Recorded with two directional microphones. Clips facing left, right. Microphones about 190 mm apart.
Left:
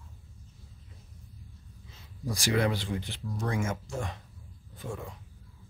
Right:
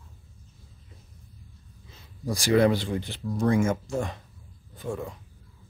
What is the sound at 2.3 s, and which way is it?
Speech, 35° right (ahead or behind).